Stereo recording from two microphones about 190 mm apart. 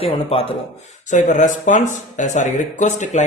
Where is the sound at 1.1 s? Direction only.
40° left (ahead or behind).